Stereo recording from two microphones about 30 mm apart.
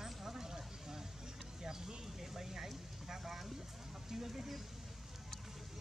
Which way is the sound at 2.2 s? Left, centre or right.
Centre.